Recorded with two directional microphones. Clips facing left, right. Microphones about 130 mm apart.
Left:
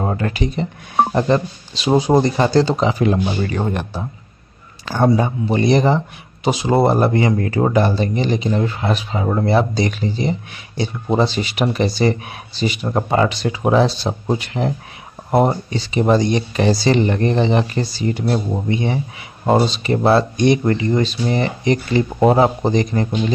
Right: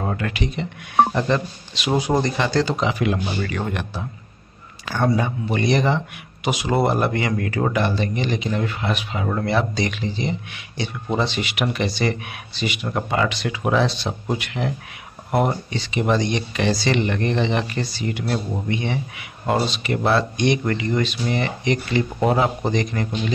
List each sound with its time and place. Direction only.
0.0 s speech: 30° left (ahead or behind)